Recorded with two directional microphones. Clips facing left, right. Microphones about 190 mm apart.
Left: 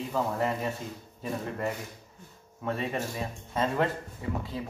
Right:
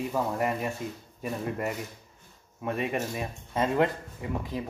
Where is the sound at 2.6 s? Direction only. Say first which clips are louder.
Right 2 dB; 15° right (ahead or behind).